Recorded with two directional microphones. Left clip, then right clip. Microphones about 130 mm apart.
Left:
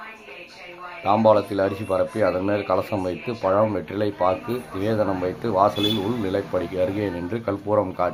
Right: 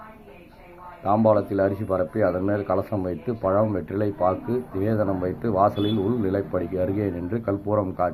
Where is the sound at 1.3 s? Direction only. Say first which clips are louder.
Left 2 dB; 15° left (ahead or behind).